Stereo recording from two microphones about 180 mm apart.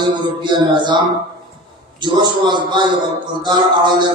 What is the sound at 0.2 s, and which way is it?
A man's voice, 25° right (ahead or behind).